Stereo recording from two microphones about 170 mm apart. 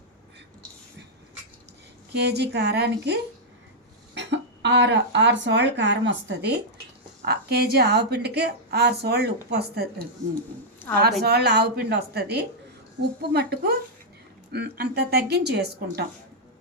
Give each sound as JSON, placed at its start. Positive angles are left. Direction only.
{"t": 2.1, "sound": "a woman's voice", "side_deg": -75}
{"t": 4.1, "sound": "a woman's voice", "side_deg": -90}
{"t": 11.2, "sound": "a woman's voice", "side_deg": -75}